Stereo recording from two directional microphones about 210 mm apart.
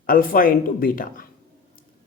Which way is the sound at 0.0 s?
40° left (ahead or behind).